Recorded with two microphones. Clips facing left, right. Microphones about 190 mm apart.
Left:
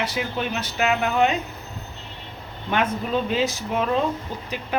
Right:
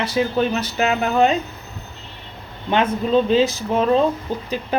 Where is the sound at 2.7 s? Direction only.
25° right (ahead or behind).